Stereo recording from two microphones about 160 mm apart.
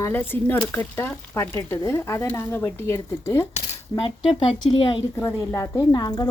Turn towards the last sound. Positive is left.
turn(degrees=25)  # may be behind; listen again after turning